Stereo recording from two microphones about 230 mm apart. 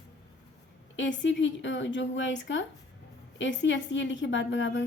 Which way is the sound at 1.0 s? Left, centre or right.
Left.